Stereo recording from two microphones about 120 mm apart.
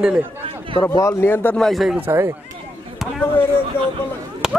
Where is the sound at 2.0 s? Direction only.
20° right (ahead or behind).